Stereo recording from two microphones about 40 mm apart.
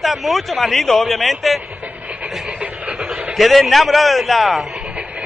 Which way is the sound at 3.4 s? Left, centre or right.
Centre.